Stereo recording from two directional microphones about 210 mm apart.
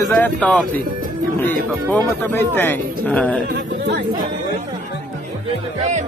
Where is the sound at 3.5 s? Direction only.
50° right (ahead or behind).